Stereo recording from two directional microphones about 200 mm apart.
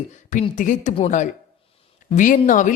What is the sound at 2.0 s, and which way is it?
Speech, 40° left (ahead or behind).